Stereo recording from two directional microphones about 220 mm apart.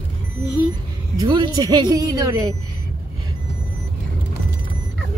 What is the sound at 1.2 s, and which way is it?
Speech, 20° right (ahead or behind).